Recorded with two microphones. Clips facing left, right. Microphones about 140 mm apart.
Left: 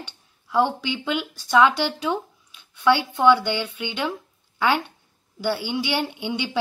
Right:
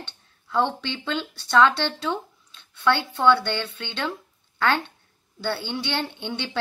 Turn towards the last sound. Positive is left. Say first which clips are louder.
# left 4 dB
turn(degrees=10)  # may be behind; listen again after turning